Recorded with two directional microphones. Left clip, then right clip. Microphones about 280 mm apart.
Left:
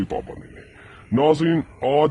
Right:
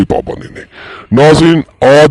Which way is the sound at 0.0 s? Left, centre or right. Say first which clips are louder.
Right 15 dB; right.